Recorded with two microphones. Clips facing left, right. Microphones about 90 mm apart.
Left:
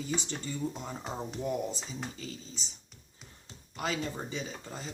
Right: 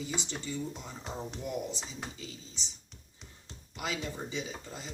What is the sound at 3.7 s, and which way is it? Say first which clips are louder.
Speech: left 3 dB; 40° left (ahead or behind).